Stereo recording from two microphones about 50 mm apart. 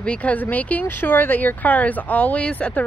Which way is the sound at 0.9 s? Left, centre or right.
Left.